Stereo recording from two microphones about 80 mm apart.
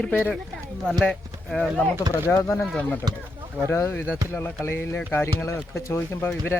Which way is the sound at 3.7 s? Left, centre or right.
Left.